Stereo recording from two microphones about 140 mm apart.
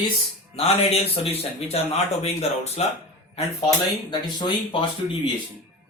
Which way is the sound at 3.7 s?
30° left (ahead or behind).